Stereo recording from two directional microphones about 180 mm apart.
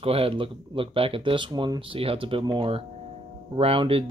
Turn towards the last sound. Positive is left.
turn(degrees=-30)  # may be behind; listen again after turning